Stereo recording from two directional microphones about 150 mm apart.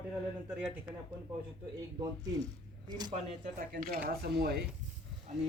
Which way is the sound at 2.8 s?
25° right (ahead or behind).